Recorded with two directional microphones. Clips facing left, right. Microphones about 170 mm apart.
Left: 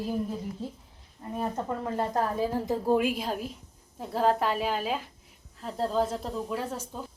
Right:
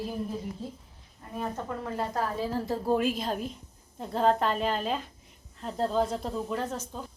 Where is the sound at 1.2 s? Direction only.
25° left (ahead or behind).